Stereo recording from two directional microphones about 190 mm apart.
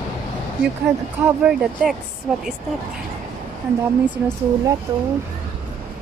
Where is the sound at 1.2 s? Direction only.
5° right (ahead or behind).